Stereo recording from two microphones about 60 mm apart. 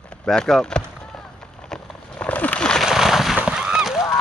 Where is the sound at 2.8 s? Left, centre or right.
Centre.